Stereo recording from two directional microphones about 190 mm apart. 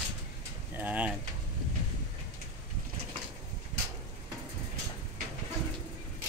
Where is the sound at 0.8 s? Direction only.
10° right (ahead or behind).